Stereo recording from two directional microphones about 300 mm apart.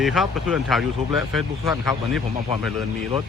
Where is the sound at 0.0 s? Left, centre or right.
Centre.